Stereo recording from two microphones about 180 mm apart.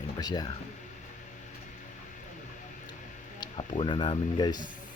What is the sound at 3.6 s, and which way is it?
Speech, 30° left (ahead or behind).